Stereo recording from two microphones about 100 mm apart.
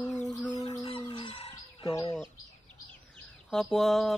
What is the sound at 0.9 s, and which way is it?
Fowl, 60° left (ahead or behind).